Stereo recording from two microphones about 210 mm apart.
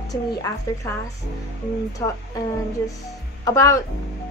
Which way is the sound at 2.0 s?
15° left (ahead or behind).